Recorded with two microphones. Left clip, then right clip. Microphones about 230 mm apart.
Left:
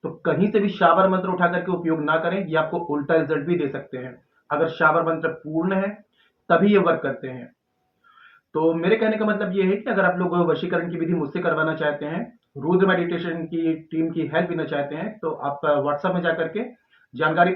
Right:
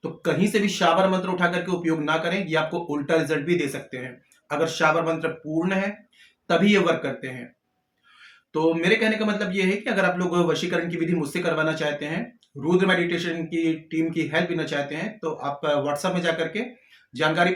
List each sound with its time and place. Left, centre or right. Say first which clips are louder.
0.0 s speech: left 2 dB; right
8.5 s speech: left 1 dB; right